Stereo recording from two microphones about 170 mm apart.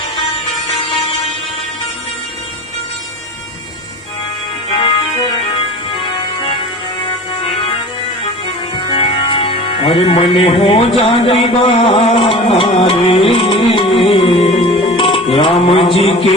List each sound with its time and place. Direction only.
4.8 s music: 30° left (ahead or behind)
16.0 s a man's voice: 35° left (ahead or behind)